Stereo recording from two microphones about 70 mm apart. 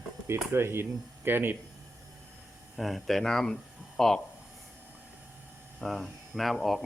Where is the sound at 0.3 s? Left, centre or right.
Right.